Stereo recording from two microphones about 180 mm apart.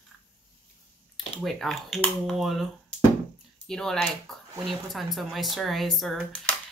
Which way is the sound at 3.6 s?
5° left (ahead or behind).